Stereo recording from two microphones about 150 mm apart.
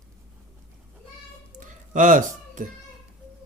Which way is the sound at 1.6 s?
60° right (ahead or behind).